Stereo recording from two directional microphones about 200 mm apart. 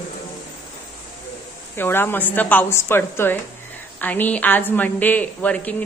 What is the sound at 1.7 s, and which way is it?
A woman's voice, 10° left (ahead or behind).